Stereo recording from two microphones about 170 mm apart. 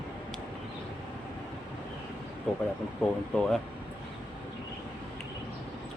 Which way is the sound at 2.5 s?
5° left (ahead or behind).